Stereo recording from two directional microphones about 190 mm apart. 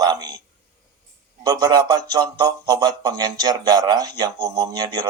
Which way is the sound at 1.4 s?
20° right (ahead or behind).